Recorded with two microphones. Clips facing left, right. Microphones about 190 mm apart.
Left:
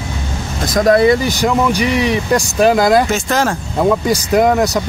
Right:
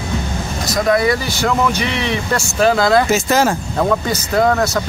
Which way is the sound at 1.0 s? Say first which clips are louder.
Left 5 dB; 20° left (ahead or behind).